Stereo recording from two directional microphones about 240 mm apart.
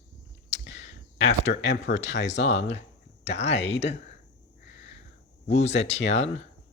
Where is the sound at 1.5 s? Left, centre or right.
Left.